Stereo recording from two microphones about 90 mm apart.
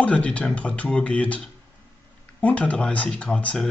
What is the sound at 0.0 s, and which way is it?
Speech, 15° left (ahead or behind).